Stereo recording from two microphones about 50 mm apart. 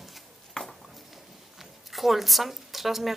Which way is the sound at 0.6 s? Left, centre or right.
Centre.